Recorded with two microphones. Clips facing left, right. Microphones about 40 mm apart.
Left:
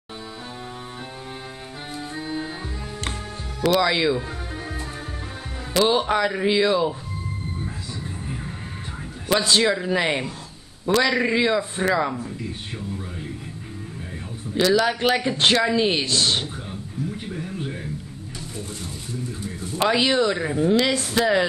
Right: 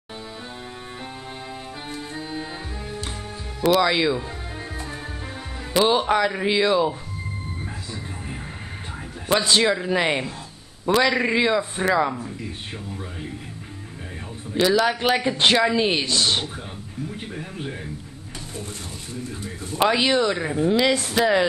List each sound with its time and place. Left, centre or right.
2.1 s music: centre
3.6 s speech: centre
5.7 s speech: centre
9.5 s speech: centre
14.5 s speech: centre
19.8 s speech: centre